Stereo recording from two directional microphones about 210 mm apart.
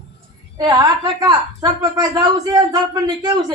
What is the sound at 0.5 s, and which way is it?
A woman's voice, 15° right (ahead or behind).